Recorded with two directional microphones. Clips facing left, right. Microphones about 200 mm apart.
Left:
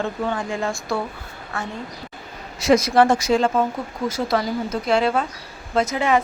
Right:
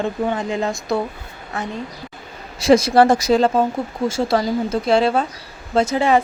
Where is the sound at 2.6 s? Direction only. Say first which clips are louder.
Right 3 dB; 30° right (ahead or behind).